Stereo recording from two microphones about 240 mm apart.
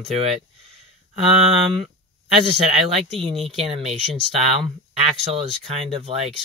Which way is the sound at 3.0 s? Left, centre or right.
Right.